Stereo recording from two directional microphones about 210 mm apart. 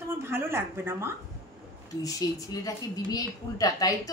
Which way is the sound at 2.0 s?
15° left (ahead or behind).